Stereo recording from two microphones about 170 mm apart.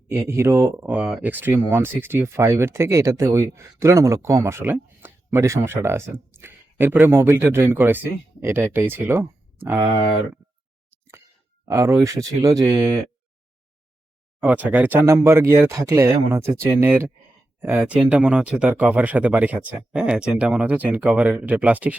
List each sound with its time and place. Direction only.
0.1 s speech: 15° right (ahead or behind)
11.6 s speech: 20° right (ahead or behind)
14.4 s speech: 10° right (ahead or behind)